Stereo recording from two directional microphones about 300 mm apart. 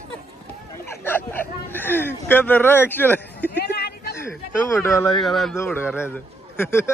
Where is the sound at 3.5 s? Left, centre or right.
Left.